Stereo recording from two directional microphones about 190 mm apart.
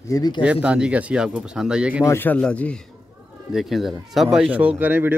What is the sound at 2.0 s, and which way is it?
Speech, 10° left (ahead or behind).